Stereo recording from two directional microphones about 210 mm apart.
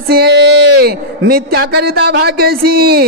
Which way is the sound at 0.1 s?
50° right (ahead or behind).